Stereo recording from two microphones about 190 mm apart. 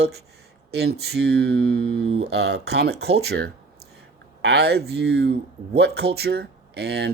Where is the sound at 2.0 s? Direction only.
30° right (ahead or behind).